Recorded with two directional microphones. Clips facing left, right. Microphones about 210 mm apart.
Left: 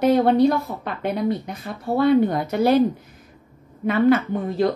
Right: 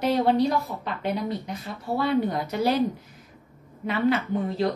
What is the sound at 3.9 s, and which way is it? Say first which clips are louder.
Speech: left 6 dB; 50° left (ahead or behind).